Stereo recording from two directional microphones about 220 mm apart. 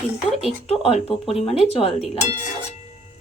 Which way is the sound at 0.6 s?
25° left (ahead or behind).